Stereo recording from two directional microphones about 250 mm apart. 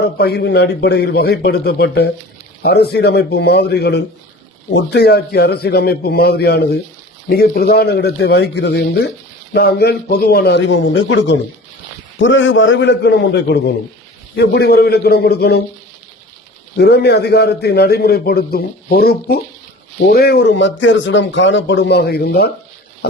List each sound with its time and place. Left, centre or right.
0.0 s a man's voice: left
16.7 s a man's voice: left